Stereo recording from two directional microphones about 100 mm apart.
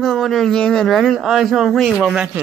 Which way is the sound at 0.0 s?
5° left (ahead or behind).